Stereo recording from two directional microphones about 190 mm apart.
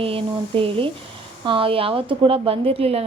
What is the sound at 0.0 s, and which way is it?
A woman's voice, 30° right (ahead or behind).